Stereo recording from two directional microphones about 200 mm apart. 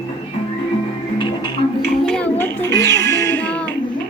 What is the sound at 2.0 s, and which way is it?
Music, 5° left (ahead or behind).